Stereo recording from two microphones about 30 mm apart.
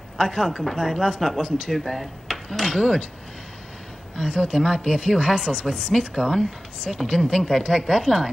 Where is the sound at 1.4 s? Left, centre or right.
Left.